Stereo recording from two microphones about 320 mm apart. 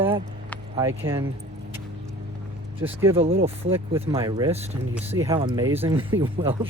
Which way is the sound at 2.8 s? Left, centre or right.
Centre.